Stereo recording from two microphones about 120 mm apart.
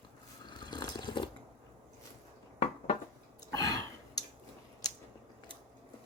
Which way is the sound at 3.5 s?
30° left (ahead or behind).